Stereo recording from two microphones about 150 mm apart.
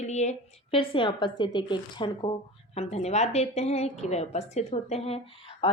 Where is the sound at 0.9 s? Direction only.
35° left (ahead or behind).